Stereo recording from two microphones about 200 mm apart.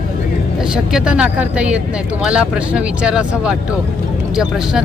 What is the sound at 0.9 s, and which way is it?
Speech, 5° right (ahead or behind).